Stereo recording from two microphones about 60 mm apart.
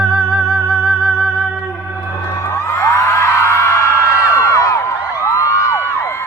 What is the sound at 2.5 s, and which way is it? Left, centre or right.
Music, left.